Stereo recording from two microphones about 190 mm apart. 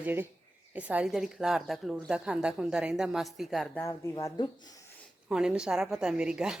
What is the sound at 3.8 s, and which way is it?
Speech, 15° left (ahead or behind).